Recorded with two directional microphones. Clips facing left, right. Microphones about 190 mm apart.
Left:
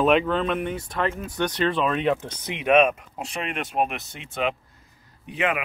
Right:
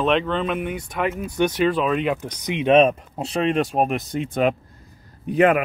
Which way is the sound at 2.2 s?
15° right (ahead or behind).